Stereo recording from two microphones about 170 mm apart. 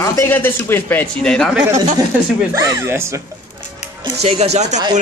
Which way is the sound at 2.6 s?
15° right (ahead or behind).